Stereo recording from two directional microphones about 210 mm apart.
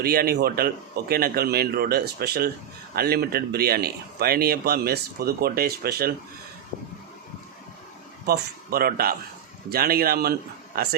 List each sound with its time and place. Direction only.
0.0 s speech: 45° right (ahead or behind)
8.3 s speech: 45° right (ahead or behind)